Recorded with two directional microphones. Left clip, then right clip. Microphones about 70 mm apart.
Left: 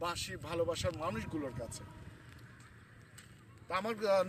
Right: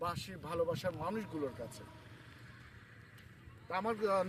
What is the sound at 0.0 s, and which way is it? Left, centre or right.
Speech, right.